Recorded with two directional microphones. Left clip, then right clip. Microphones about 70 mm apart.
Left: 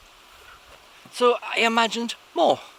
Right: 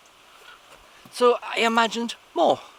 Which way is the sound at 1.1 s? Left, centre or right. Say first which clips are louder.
Right 1 dB; centre.